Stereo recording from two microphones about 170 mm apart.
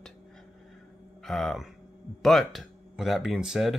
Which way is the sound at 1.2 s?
Centre (ahead or behind).